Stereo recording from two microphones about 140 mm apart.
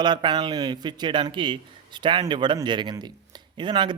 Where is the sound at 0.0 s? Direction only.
35° right (ahead or behind).